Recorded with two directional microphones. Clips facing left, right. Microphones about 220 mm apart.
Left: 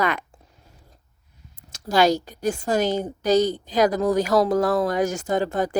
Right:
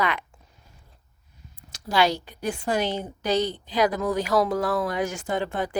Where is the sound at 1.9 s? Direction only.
45° left (ahead or behind).